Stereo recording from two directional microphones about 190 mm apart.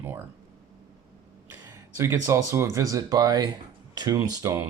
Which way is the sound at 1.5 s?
15° right (ahead or behind).